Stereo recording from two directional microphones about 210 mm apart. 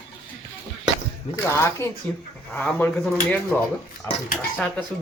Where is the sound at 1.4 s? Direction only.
10° left (ahead or behind).